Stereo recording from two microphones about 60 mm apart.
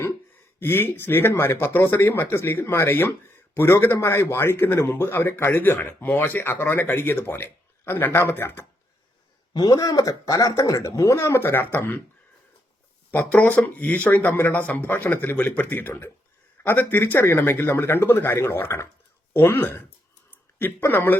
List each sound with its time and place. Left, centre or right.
0.6 s speech: left
9.7 s speech: left
11.1 s speech: left
13.1 s speech: left